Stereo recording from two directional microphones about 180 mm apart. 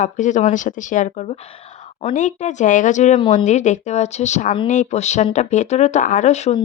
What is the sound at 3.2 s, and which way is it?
Speech, 30° left (ahead or behind).